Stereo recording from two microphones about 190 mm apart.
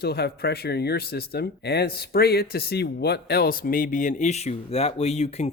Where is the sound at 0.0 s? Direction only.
55° left (ahead or behind).